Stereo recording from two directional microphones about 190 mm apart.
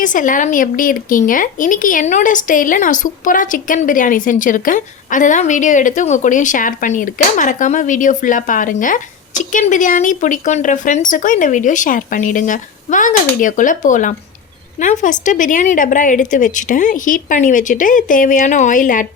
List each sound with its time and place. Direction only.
0.0 s speech: 45° left (ahead or behind)